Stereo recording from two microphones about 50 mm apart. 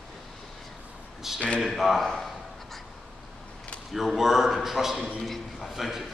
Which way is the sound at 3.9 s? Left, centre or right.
Centre.